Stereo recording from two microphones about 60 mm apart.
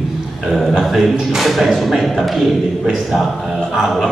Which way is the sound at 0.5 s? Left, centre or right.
Centre.